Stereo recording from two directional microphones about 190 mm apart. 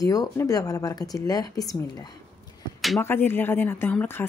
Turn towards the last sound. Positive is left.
turn(degrees=10)  # may be behind; listen again after turning